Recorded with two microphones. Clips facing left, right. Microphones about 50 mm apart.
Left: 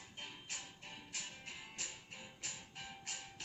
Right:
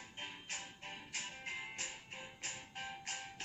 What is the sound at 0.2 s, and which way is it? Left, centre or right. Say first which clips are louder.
Music: right 3 dB; right.